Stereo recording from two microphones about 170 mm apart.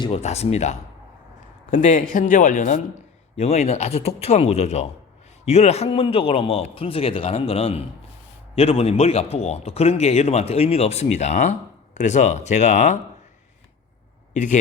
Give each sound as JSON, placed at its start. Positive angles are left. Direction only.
{"t": 0.0, "sound": "a man's voice", "side_deg": 40}
{"t": 14.3, "sound": "speech", "side_deg": 45}